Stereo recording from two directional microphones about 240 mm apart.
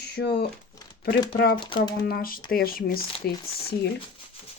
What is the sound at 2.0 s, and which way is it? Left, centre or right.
Speech, left.